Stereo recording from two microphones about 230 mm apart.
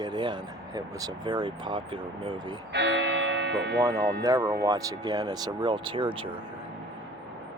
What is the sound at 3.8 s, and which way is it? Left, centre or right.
Speech, centre.